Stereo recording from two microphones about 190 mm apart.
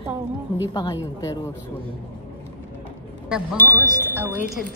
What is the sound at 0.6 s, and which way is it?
Speech, 20° left (ahead or behind).